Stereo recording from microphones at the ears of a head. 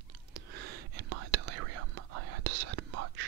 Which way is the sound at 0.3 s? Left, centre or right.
Right.